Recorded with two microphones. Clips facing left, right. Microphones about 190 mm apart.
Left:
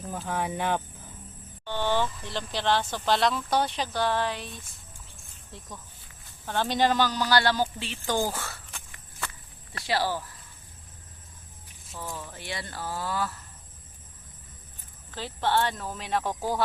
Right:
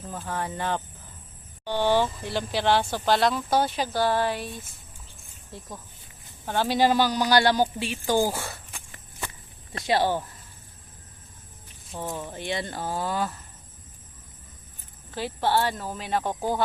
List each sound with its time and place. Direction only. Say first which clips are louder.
0.0 s speech: left 1 dB; 10° left (ahead or behind)
1.6 s speech: right 4 dB; 15° right (ahead or behind)
6.4 s speech: right 3 dB; 10° right (ahead or behind)
9.7 s speech: right 4 dB; 20° right (ahead or behind)
11.9 s speech: right 5 dB; 25° right (ahead or behind)
15.1 s speech: right 2 dB; 10° right (ahead or behind)
16.2 s speech: right 2 dB; 25° right (ahead or behind)